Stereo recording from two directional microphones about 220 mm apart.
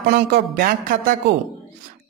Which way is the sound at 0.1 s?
40° right (ahead or behind).